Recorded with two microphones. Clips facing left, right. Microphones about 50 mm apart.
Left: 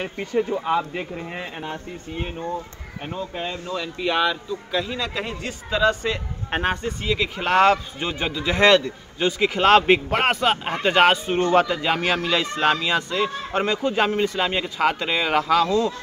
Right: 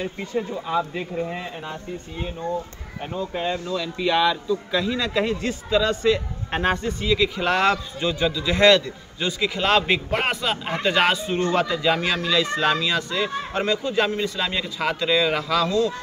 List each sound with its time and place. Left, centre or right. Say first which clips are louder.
0.0 s speech: left 3 dB; left
3.2 s speech: right 4 dB; centre
3.6 s a man's voice: right 1 dB; centre
7.3 s a man's voice: left 3 dB; left
13.8 s a man's voice: left 2 dB; left